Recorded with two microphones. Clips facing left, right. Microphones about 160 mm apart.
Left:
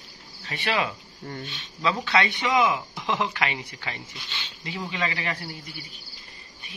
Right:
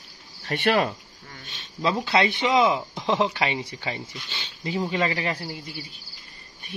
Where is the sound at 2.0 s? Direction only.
30° right (ahead or behind).